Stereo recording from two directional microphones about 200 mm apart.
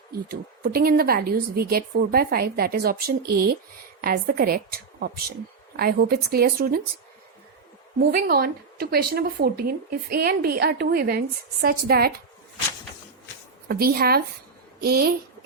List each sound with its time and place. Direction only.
0.1 s a woman's voice: 50° right (ahead or behind)
7.9 s a woman's voice: 50° right (ahead or behind)
13.7 s a woman's voice: 50° right (ahead or behind)